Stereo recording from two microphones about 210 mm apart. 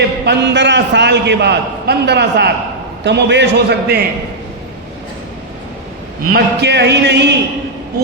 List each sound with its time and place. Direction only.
0.3 s a man's voice: 55° right (ahead or behind)
6.3 s a man's voice: 55° right (ahead or behind)